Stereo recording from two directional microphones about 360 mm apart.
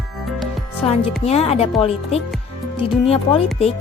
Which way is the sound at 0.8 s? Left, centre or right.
Centre.